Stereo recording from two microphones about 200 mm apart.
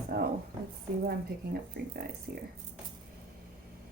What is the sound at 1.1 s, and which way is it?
A woman's voice, 55° right (ahead or behind).